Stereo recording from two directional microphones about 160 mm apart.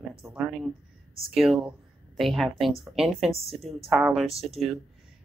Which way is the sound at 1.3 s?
Centre (ahead or behind).